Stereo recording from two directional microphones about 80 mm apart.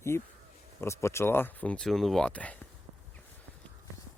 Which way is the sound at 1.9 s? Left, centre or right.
Centre.